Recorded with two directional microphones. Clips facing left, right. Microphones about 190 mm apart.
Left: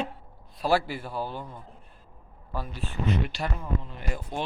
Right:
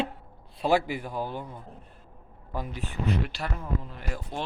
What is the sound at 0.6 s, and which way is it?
Mantra, 15° right (ahead or behind).